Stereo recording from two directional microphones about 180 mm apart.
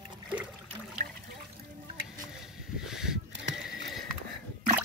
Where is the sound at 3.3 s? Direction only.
85° right.